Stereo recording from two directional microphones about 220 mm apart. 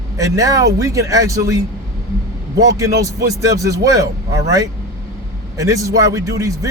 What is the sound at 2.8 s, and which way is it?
Speech, 15° right (ahead or behind).